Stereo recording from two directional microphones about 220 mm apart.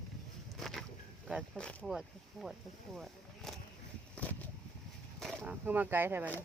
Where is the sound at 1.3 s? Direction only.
Centre (ahead or behind).